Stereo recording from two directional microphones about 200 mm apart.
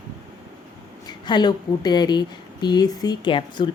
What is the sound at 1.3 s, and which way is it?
Speech, 20° left (ahead or behind).